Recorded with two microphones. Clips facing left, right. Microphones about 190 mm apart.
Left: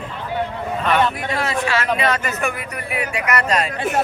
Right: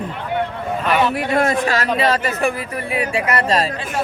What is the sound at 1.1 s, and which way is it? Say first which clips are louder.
Speech: right 6 dB; 50° right (ahead or behind).